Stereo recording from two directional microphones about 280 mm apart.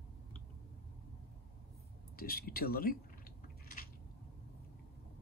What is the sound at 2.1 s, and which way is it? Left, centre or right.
Speech, left.